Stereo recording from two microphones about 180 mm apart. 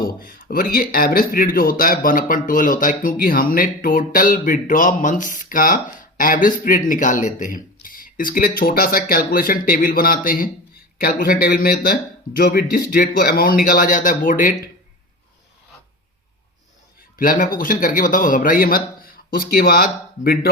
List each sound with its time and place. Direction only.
0.0 s speech: 55° left (ahead or behind)
17.2 s speech: 50° left (ahead or behind)